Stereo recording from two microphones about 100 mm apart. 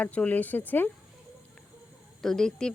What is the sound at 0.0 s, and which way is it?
Speech, 15° left (ahead or behind).